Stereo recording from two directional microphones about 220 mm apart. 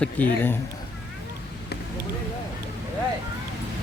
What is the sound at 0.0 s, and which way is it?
Speech, 5° left (ahead or behind).